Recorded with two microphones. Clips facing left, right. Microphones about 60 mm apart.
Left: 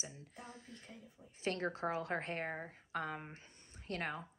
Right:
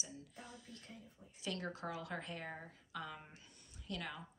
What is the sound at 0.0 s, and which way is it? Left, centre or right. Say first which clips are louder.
Speech: left 2 dB; left.